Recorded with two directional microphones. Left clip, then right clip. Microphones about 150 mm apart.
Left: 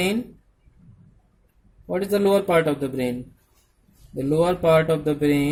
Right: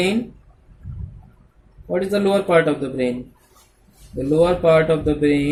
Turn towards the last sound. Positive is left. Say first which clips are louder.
# right 3 dB
turn(degrees=75)  # may be behind; listen again after turning